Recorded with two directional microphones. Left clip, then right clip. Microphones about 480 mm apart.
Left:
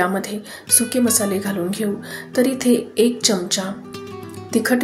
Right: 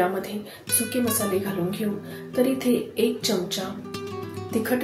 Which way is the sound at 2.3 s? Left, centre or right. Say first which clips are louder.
Left 5 dB; centre.